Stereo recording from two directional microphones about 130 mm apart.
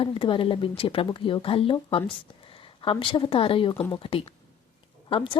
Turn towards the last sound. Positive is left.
turn(degrees=45)  # may be behind; listen again after turning